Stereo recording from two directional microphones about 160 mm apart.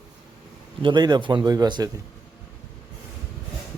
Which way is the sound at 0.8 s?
30° right (ahead or behind).